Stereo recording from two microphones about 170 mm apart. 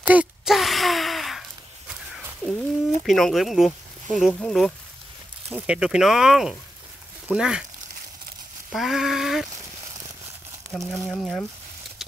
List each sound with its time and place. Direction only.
0.0 s gasp: 10° right (ahead or behind)
2.4 s speech: 5° left (ahead or behind)
8.7 s speech: centre (ahead or behind)
10.8 s speech: 15° right (ahead or behind)
11.1 s speech: centre (ahead or behind)